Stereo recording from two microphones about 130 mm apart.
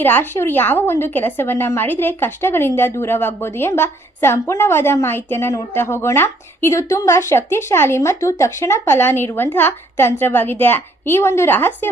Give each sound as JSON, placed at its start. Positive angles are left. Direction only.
{"t": 0.0, "sound": "a woman's voice", "side_deg": 15}